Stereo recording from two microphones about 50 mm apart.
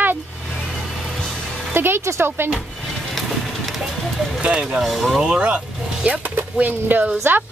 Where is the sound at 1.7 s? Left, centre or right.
Right.